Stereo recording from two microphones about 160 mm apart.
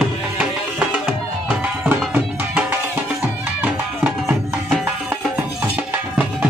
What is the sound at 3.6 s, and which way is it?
Music, 10° right (ahead or behind).